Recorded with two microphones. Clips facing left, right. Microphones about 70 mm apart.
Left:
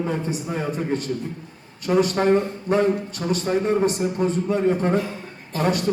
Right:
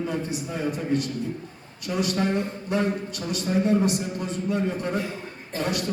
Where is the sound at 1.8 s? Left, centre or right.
Left.